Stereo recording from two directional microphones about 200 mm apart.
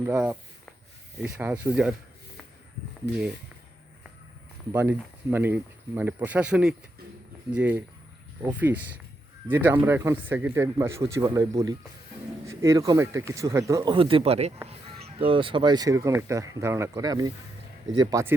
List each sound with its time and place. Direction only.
0.0 s speech: 10° right (ahead or behind)
3.1 s speech: 60° left (ahead or behind)
4.7 s speech: 10° right (ahead or behind)